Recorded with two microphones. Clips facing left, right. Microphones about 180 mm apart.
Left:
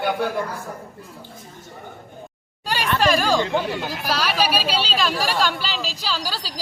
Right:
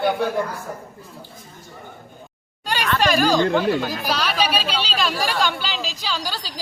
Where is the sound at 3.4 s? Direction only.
55° right (ahead or behind).